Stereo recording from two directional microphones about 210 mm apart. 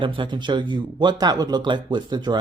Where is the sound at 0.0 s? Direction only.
25° right (ahead or behind).